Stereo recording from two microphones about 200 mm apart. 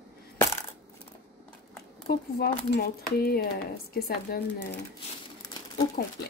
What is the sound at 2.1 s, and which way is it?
Speech, 50° left (ahead or behind).